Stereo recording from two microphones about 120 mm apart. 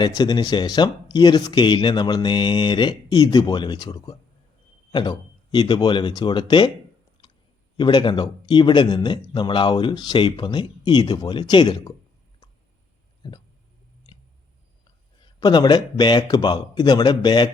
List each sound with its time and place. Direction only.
0.2 s speech: 35° left (ahead or behind)
7.2 s clicking: 40° left (ahead or behind)
7.8 s speech: 40° left (ahead or behind)
13.2 s speech: 40° left (ahead or behind)
15.2 s speech: 35° left (ahead or behind)